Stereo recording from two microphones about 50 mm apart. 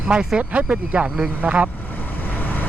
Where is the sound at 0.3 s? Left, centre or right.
Right.